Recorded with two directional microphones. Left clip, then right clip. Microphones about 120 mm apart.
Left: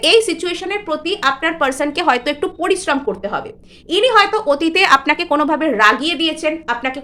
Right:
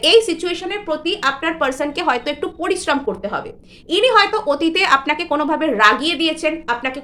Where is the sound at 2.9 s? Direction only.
25° left (ahead or behind).